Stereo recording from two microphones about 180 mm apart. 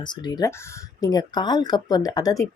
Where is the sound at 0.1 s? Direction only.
20° left (ahead or behind).